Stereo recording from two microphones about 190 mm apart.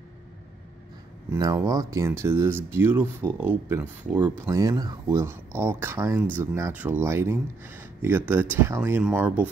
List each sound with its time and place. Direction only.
1.3 s speech: 15° right (ahead or behind)